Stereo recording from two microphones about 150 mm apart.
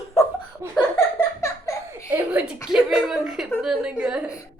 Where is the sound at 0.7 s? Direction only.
15° left (ahead or behind).